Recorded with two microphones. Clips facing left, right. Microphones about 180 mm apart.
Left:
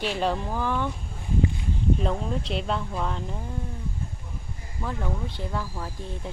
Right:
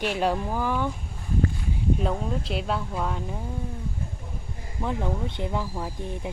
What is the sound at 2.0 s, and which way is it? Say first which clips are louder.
Speech: even; 5° right (ahead or behind).